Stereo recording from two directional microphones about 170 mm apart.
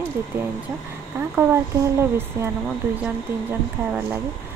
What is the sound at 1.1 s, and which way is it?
Speech, 15° right (ahead or behind).